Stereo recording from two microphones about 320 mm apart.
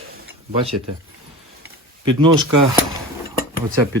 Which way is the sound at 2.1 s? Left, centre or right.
Centre.